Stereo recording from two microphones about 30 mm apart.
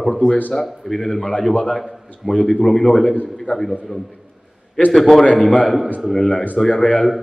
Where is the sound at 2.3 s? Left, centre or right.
Left.